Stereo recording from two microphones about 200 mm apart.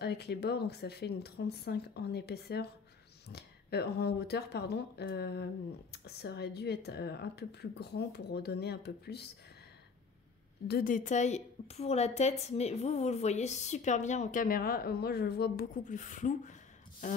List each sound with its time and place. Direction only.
0.0 s speech: 55° left (ahead or behind)
10.7 s a woman's voice: 40° left (ahead or behind)